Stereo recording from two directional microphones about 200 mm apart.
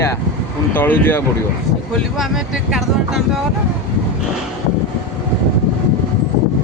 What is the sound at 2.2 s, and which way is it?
Speech, centre (ahead or behind).